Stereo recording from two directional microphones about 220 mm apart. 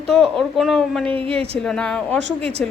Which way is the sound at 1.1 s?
25° right (ahead or behind).